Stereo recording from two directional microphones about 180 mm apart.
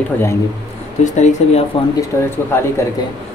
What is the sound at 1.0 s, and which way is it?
Speech, 40° left (ahead or behind).